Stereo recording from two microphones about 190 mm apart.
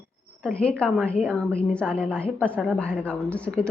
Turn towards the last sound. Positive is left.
turn(degrees=5)  # may be behind; listen again after turning